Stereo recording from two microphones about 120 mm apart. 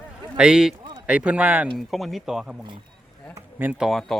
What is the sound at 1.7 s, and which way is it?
Speech, centre (ahead or behind).